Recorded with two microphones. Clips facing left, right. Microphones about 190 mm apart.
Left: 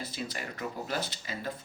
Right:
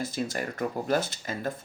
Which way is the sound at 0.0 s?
45° right (ahead or behind).